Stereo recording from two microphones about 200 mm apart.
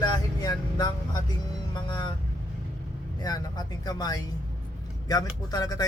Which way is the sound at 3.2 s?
20° left (ahead or behind).